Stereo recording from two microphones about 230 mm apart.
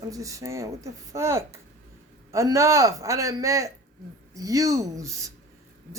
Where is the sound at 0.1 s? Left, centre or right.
Centre.